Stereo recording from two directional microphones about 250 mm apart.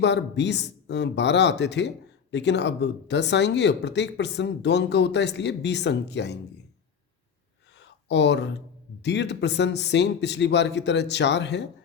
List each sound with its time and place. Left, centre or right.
0.0 s speech: left
7.8 s a sound: left
9.0 s speech: left